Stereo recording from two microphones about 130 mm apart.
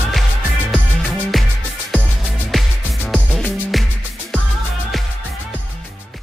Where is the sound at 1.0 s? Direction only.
Centre (ahead or behind).